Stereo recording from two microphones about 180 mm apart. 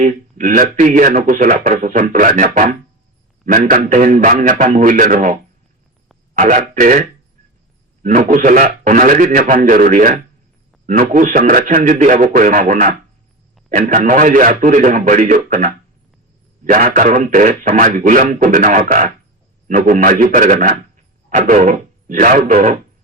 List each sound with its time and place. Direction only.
0.0 s speech: 45° right (ahead or behind)
8.0 s a man's voice: 45° right (ahead or behind)